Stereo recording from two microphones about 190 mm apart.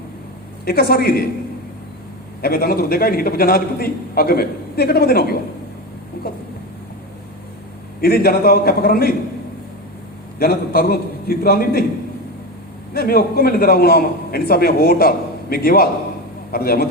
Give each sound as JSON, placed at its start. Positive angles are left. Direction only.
{"t": 0.6, "sound": "a man's voice", "side_deg": 55}
{"t": 2.4, "sound": "a man's voice", "side_deg": 55}
{"t": 6.2, "sound": "a sound", "side_deg": 50}
{"t": 8.0, "sound": "a man's voice", "side_deg": 55}
{"t": 10.3, "sound": "a man's voice", "side_deg": 55}
{"t": 12.9, "sound": "a man's voice", "side_deg": 55}